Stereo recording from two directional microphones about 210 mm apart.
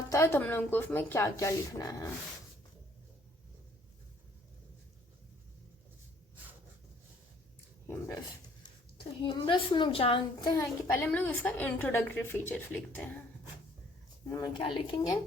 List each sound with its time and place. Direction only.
0.1 s a child's voice: 15° left (ahead or behind)
7.9 s a sound: 10° left (ahead or behind)
9.2 s a child's voice: 20° left (ahead or behind)
14.3 s a child's voice: 15° left (ahead or behind)
14.6 s a woman's voice: 25° left (ahead or behind)